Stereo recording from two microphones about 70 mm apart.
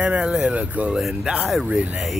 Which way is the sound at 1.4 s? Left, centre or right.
Centre.